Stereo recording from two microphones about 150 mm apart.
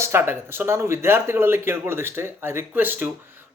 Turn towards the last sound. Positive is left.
turn(degrees=-15)  # may be behind; listen again after turning